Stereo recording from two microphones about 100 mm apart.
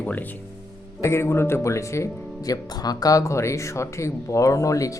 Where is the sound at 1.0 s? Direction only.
25° left (ahead or behind).